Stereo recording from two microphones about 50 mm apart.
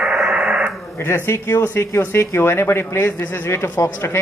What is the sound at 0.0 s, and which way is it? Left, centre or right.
Radio, right.